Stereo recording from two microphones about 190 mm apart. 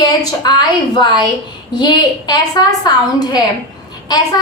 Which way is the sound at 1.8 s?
20° left (ahead or behind).